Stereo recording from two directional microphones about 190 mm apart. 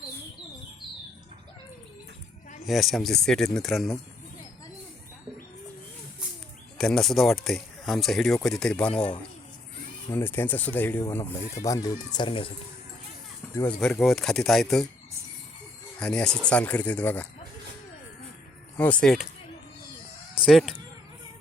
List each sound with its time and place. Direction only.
2.6 s speech: centre (ahead or behind)
6.7 s speech: 5° left (ahead or behind)
10.1 s speech: 10° left (ahead or behind); by 12.5 s 30° left (ahead or behind)
13.6 s speech: 5° left (ahead or behind)
16.0 s speech: 5° left (ahead or behind)
18.8 s speech: 5° left (ahead or behind)
20.4 s speech: centre (ahead or behind)